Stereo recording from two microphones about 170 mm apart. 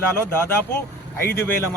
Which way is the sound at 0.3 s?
15° left (ahead or behind).